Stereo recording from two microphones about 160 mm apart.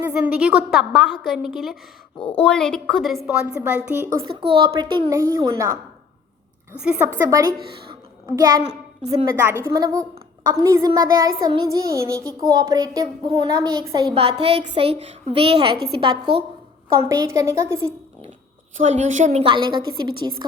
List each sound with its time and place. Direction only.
0.0 s a woman's voice: 10° right (ahead or behind)
3.2 s a woman's voice: 10° right (ahead or behind)
4.5 s a woman's voice: 30° right (ahead or behind)
5.0 s child singing: 20° right (ahead or behind)
6.8 s a woman's voice: 10° right (ahead or behind)
7.6 s a woman's voice: 75° right (ahead or behind)
8.4 s child singing: 20° right (ahead or behind)
8.6 s a child's voice: 40° right (ahead or behind)
9.2 s a woman's voice: 15° right (ahead or behind)
10.5 s child singing: 20° right (ahead or behind)
14.1 s a woman's voice: 35° right (ahead or behind); by 17.9 s 15° right (ahead or behind)
18.8 s a woman's voice: 50° right (ahead or behind); by 19.8 s 30° right (ahead or behind)